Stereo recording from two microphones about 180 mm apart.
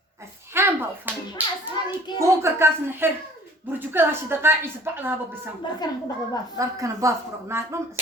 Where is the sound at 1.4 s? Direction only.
10° right (ahead or behind).